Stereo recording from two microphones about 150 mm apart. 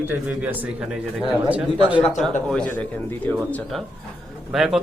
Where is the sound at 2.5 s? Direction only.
10° left (ahead or behind).